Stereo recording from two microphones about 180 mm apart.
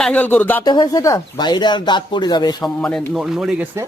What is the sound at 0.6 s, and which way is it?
Speech, 25° left (ahead or behind).